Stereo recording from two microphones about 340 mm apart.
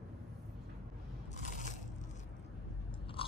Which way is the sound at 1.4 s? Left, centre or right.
Left.